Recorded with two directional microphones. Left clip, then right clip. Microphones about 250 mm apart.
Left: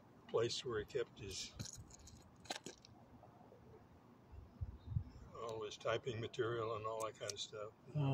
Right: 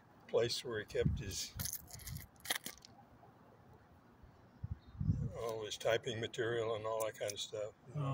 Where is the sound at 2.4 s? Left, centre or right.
Right.